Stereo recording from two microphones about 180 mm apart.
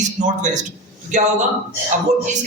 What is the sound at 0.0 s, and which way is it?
A man's voice, 40° right (ahead or behind).